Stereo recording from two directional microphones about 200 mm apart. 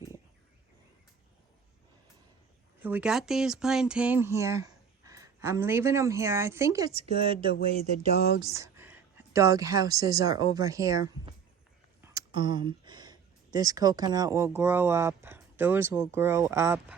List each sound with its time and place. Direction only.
2.8 s speech: 5° right (ahead or behind)
6.9 s speech: 30° right (ahead or behind)
8.4 s speech: 15° right (ahead or behind)